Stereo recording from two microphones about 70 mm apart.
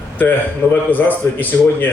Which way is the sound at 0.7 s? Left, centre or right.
Left.